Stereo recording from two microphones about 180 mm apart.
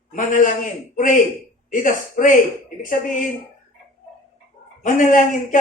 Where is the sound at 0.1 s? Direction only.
45° left (ahead or behind).